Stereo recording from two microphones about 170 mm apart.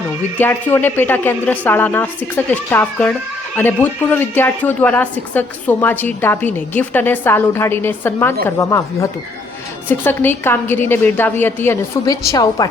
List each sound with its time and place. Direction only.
0.3 s speech: 10° left (ahead or behind)